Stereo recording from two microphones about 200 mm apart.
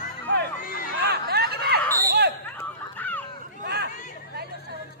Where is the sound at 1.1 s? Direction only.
55° right (ahead or behind).